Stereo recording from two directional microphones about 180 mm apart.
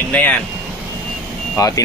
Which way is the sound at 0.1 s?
10° left (ahead or behind).